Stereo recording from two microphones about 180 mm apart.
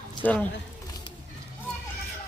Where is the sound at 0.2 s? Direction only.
10° left (ahead or behind).